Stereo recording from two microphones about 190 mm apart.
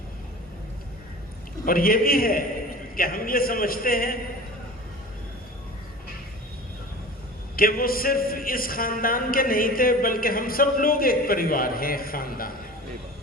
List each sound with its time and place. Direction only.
1.6 s speech: 50° left (ahead or behind)
7.5 s speech: 50° left (ahead or behind)